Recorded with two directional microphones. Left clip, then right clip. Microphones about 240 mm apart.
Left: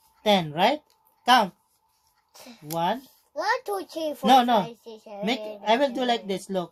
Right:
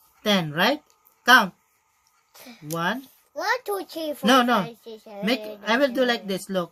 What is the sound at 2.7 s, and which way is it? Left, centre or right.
Speech, right.